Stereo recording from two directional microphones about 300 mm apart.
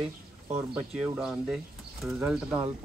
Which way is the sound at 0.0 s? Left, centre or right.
Centre.